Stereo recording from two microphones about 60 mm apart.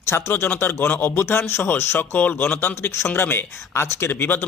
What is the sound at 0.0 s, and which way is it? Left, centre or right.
Speech, left.